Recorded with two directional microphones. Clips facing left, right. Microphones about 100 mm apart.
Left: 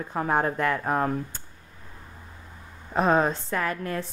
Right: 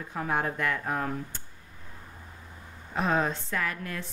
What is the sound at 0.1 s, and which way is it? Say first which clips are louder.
A woman's voice: left 5 dB; 40° left (ahead or behind).